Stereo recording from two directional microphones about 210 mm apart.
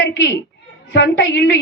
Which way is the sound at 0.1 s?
55° left (ahead or behind).